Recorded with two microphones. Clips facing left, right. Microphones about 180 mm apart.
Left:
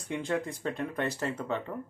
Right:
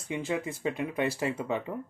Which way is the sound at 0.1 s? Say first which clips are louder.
Even; 5° right (ahead or behind).